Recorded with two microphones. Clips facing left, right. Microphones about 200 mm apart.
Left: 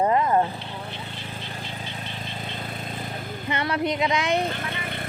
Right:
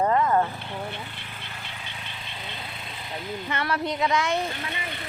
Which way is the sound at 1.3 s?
35° left (ahead or behind).